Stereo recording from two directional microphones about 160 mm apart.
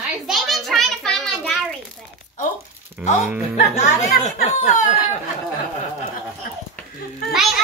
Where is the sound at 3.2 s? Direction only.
10° right (ahead or behind).